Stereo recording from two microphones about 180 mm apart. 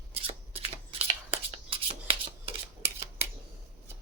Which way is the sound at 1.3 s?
30° right (ahead or behind).